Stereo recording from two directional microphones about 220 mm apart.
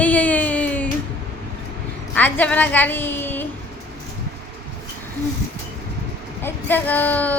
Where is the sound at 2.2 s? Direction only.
10° left (ahead or behind).